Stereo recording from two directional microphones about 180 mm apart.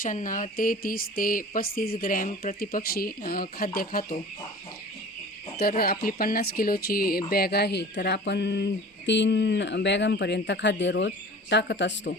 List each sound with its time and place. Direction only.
0.0 s speech: 45° left (ahead or behind)
5.5 s speech: 60° left (ahead or behind); by 12.1 s 80° left